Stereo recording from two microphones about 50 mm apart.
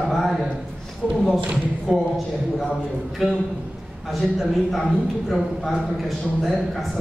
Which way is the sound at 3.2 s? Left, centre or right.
Centre.